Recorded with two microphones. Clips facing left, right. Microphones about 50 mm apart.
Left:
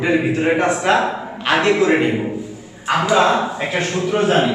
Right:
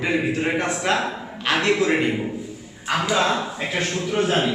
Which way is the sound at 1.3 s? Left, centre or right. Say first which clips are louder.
Left 4 dB; centre.